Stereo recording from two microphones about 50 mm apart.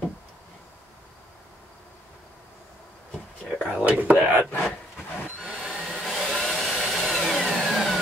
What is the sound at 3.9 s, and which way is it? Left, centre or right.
Whispering, right.